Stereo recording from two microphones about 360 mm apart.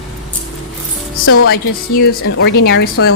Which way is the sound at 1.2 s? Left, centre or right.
Left.